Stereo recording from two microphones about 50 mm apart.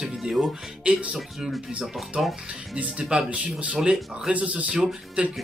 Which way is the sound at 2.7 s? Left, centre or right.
Centre.